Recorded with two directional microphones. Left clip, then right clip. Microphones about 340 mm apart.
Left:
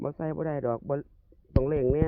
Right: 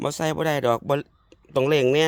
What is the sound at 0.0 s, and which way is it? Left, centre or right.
Speech, centre.